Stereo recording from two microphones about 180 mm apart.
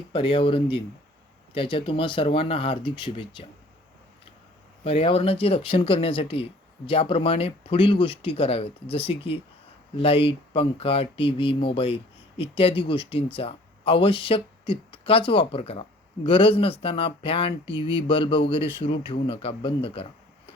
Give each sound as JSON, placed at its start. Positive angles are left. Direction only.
{"t": 0.1, "sound": "speech", "side_deg": 30}
{"t": 4.8, "sound": "speech", "side_deg": 30}